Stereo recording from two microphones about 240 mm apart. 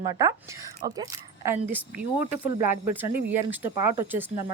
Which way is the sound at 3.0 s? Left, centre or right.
Centre.